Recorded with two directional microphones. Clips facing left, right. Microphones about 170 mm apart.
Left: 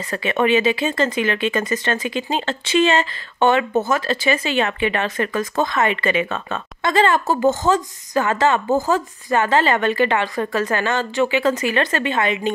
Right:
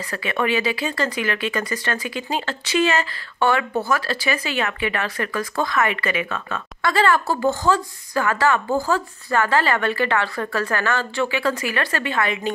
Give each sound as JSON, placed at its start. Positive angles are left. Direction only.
{"t": 0.1, "sound": "speech", "side_deg": 25}